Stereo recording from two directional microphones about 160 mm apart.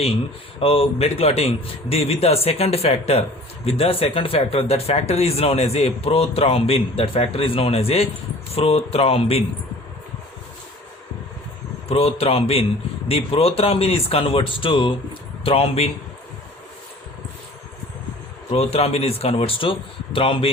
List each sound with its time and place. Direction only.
0.6 s speech: 35° left (ahead or behind)
11.9 s speech: 35° left (ahead or behind)
18.5 s speech: 40° left (ahead or behind)